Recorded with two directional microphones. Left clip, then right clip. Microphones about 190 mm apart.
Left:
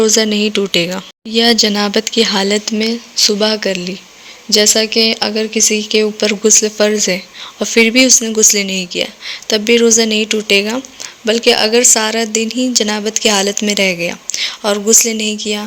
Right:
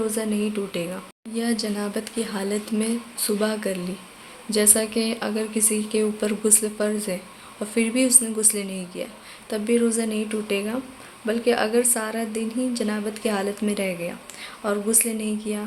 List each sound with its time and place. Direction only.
0.0 s a woman's voice: 35° left (ahead or behind)